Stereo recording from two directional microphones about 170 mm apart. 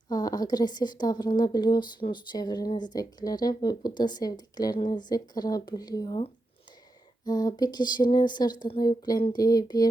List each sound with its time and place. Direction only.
0.1 s a woman's voice: 20° left (ahead or behind)
7.3 s a woman's voice: 25° left (ahead or behind)